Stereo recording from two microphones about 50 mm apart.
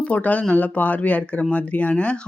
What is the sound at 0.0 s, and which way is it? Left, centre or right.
Speech, left.